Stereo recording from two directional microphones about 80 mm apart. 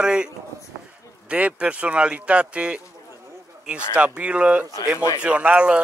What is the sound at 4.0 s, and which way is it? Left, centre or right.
A man's voice, centre.